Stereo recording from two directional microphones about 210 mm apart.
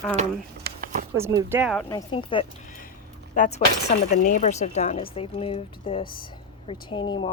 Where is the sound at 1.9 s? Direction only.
20° left (ahead or behind).